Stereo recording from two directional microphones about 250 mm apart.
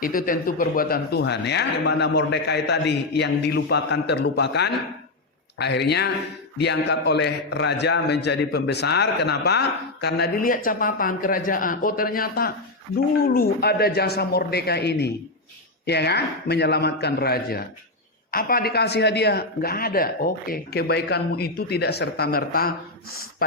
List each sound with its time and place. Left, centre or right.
0.0 s a man's voice: left